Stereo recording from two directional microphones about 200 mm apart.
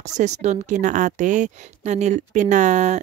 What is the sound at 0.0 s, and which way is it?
A woman's voice, 35° right (ahead or behind).